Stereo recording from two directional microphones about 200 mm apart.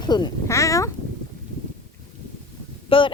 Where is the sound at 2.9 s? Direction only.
25° left (ahead or behind).